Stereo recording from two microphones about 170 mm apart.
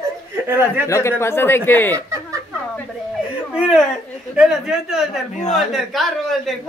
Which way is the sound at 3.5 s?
5° right (ahead or behind).